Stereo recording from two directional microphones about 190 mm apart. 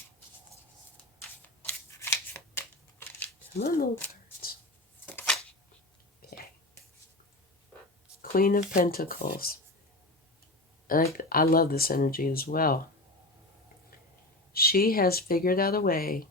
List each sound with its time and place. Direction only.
2.0 s scissors: 10° left (ahead or behind)
3.6 s speech: 50° left (ahead or behind)
5.0 s shuffling cards: 5° left (ahead or behind)
6.2 s a sound: 50° left (ahead or behind)
8.2 s speech: 50° left (ahead or behind)
10.8 s speech: 50° left (ahead or behind)
14.5 s speech: 55° left (ahead or behind)